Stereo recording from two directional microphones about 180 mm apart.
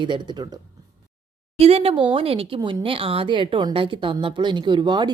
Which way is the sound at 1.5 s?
35° right (ahead or behind).